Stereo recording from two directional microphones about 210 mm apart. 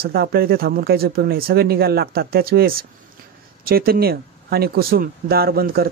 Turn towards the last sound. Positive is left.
turn(degrees=-45)  # may be behind; listen again after turning